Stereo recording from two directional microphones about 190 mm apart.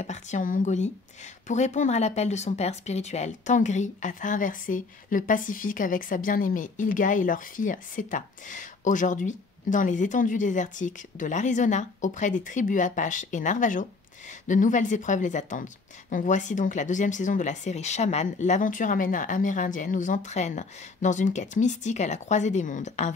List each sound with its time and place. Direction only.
0.0 s speech: 40° left (ahead or behind)